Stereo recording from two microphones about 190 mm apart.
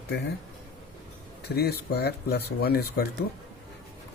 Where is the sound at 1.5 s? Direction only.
55° left (ahead or behind).